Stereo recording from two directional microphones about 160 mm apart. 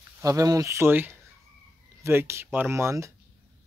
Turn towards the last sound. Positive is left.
turn(degrees=-15)  # may be behind; listen again after turning